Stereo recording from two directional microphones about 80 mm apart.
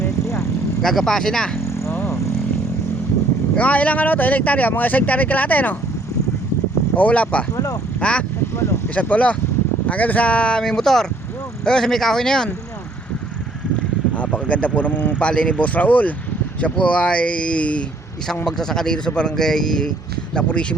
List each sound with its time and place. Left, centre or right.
0.3 s vehicle: centre
1.9 s a sound: left
3.5 s speech: centre
6.9 s speech: centre
7.5 s speech: left
8.0 s speech: centre
14.2 s speech: centre